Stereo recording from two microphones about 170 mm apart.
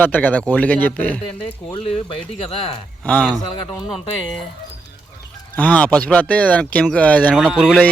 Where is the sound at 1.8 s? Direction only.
35° left (ahead or behind).